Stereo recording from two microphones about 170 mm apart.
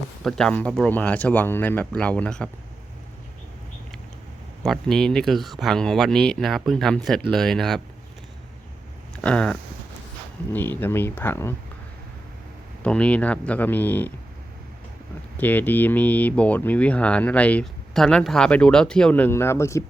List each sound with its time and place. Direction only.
0.3 s speech: 5° left (ahead or behind)
4.6 s speech: centre (ahead or behind)
9.2 s speech: 5° left (ahead or behind)
12.8 s speech: 5° left (ahead or behind)
15.4 s speech: 10° left (ahead or behind)